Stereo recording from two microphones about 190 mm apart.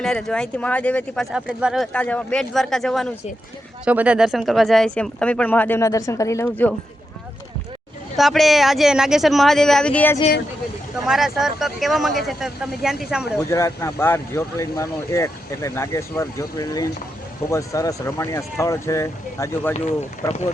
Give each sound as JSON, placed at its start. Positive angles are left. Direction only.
{"t": 0.0, "sound": "speech", "side_deg": 5}
{"t": 8.1, "sound": "speech", "side_deg": 0}
{"t": 13.5, "sound": "speech", "side_deg": 15}
{"t": 20.2, "sound": "speech", "side_deg": 35}